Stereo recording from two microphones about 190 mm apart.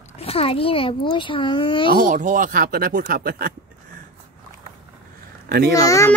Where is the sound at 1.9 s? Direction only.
45° right (ahead or behind).